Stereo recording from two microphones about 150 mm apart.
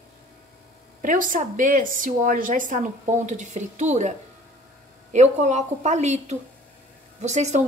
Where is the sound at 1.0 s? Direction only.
60° right (ahead or behind).